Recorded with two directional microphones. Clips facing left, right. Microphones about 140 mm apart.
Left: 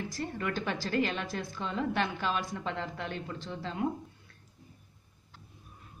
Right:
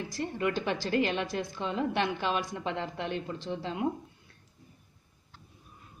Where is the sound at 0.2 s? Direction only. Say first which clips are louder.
Right 3 dB; 15° right (ahead or behind).